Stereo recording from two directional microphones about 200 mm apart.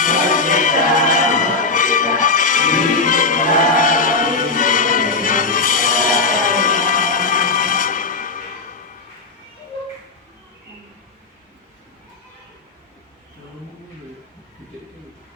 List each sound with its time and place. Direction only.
0.0 s music: 40° left (ahead or behind)